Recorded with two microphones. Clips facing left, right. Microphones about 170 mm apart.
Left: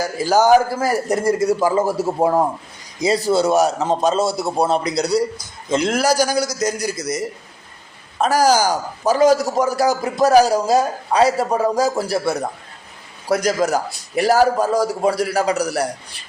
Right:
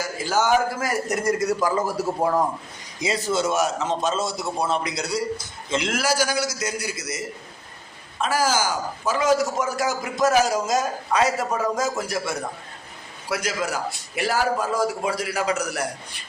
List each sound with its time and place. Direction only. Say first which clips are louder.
0.0 s a man's voice: left 7 dB; 35° left (ahead or behind)